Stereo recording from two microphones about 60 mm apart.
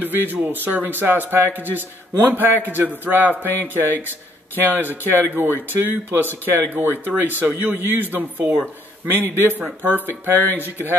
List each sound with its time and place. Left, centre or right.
0.0 s speech: right